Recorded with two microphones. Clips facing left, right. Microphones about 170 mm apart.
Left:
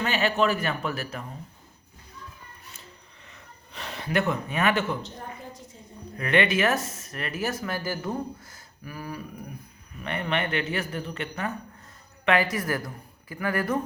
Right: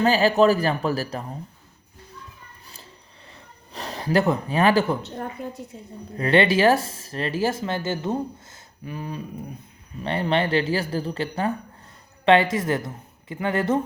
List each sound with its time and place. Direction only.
0.0 s speech: 35° right (ahead or behind)
3.3 s a sound: 35° right (ahead or behind)
6.1 s a woman's voice: 30° right (ahead or behind)